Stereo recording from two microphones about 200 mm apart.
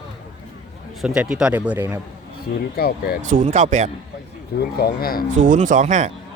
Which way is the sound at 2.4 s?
50° left (ahead or behind).